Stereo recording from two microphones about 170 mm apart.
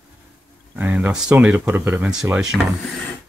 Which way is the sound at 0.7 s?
10° right (ahead or behind).